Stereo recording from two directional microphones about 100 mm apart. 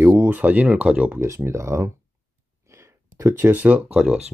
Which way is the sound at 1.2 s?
30° right (ahead or behind).